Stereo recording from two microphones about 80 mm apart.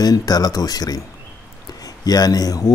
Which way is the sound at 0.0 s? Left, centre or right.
Left.